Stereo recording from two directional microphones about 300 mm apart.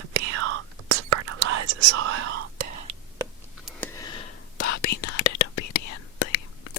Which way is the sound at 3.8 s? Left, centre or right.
Centre.